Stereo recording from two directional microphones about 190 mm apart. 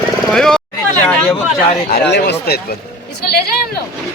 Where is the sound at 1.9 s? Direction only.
60° left (ahead or behind).